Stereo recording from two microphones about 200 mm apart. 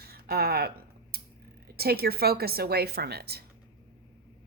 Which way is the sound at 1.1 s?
50° right (ahead or behind).